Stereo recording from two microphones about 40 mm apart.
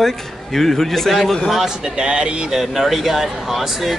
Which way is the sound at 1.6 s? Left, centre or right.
Right.